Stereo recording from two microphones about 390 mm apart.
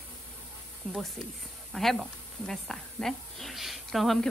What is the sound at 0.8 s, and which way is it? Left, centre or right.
Speech, centre.